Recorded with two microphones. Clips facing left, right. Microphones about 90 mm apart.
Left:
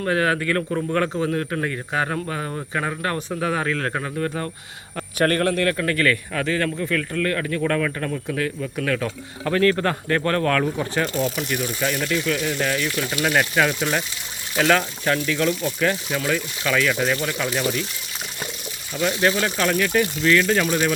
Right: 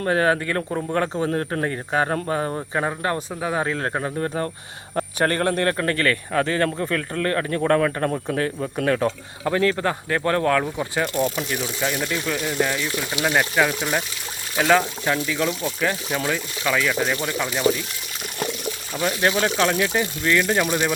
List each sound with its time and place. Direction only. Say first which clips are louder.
0.0 s speech: right 1 dB; 30° right (ahead or behind)
1.3 s speech: right 1 dB; 35° right (ahead or behind)
9.4 s speech: left 1 dB; 15° right (ahead or behind)
19.2 s speech: right 2 dB; 25° right (ahead or behind)